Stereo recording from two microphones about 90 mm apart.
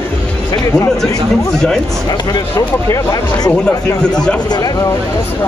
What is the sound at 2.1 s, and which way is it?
Speech, 50° left (ahead or behind).